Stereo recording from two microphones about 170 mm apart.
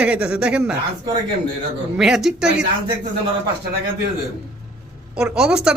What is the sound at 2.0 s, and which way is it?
Speech, centre (ahead or behind).